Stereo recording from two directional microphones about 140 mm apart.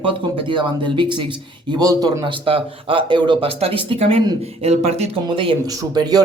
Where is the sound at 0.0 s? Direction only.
40° right (ahead or behind).